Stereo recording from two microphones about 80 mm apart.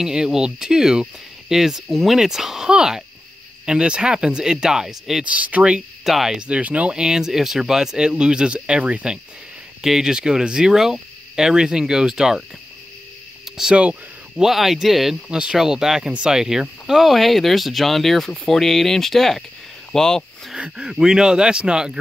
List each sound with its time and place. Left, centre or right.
0.0 s speech: centre
5.2 s speech: centre
6.0 s speech: centre
13.6 s speech: centre
19.9 s a sound: centre
20.5 s speech: centre